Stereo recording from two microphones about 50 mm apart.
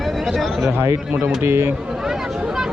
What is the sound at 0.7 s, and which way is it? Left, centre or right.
Speech, right.